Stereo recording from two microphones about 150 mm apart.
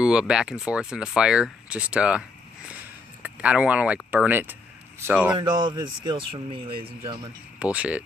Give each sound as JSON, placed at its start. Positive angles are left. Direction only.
{"t": 0.0, "sound": "speech", "side_deg": -5}
{"t": 3.2, "sound": "speech", "side_deg": -10}
{"t": 5.4, "sound": "a man's voice", "side_deg": -30}
{"t": 7.6, "sound": "speech", "side_deg": -10}